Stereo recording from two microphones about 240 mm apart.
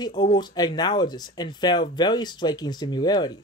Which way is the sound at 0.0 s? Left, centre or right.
Centre.